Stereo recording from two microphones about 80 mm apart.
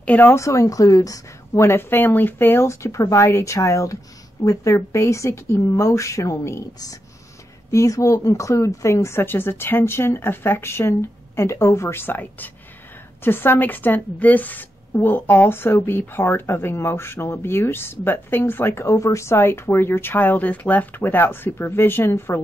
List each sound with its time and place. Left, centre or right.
0.0 s speech: centre
0.3 s a woman's voice: left
7.7 s a woman's voice: left